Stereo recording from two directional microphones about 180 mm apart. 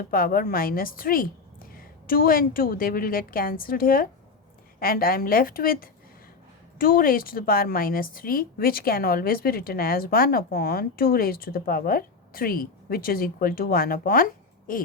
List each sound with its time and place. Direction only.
0.1 s a woman's voice: 55° left (ahead or behind)